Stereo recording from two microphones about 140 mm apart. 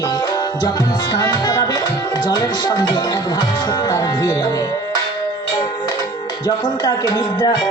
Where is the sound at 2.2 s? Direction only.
30° left (ahead or behind).